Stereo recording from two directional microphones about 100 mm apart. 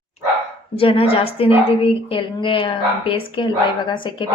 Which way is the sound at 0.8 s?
65° left (ahead or behind).